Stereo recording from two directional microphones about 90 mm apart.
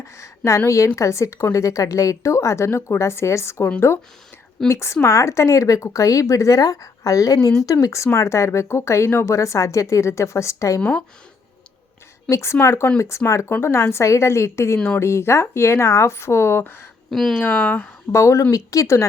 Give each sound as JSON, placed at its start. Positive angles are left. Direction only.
{"t": 0.0, "sound": "a sound", "side_deg": 35}
{"t": 0.9, "sound": "speech", "side_deg": 35}
{"t": 10.8, "sound": "speech", "side_deg": 10}
{"t": 12.3, "sound": "speech", "side_deg": 30}
{"t": 17.1, "sound": "speech", "side_deg": 5}
{"t": 17.3, "sound": "speech", "side_deg": 20}
{"t": 18.1, "sound": "speech", "side_deg": 35}